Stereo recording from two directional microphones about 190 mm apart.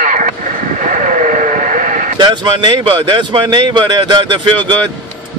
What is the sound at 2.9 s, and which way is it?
Speech, 25° right (ahead or behind).